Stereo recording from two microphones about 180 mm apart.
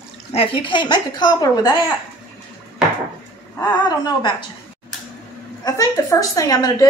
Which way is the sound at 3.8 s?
20° left (ahead or behind).